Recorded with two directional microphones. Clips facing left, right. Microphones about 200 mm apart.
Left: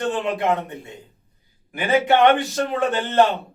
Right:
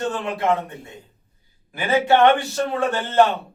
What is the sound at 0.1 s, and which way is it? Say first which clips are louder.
Speech: left 1 dB; 20° left (ahead or behind).